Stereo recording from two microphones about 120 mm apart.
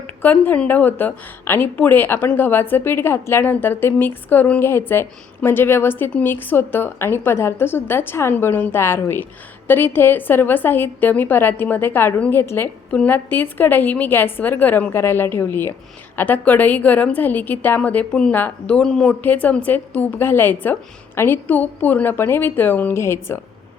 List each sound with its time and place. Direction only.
0.2 s a woman's voice: 15° left (ahead or behind)